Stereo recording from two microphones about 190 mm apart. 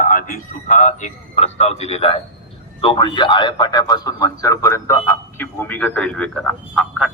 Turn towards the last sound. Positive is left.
turn(degrees=0)  # may be behind; listen again after turning